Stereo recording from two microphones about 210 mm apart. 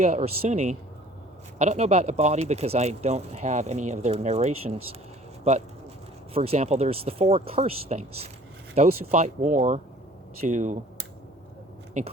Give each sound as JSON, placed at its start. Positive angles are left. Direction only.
{"t": 0.0, "sound": "speech", "side_deg": -30}
{"t": 6.3, "sound": "speech", "side_deg": -30}